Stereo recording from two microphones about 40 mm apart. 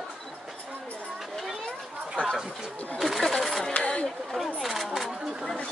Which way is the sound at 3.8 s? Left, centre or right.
Left.